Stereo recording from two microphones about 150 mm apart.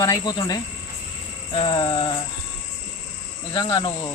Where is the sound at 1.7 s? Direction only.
30° left (ahead or behind).